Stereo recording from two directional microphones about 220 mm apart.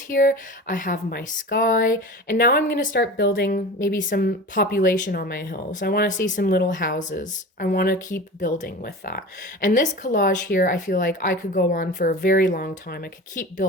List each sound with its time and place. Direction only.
0.1 s speech: 40° left (ahead or behind)
3.8 s speech: 40° left (ahead or behind)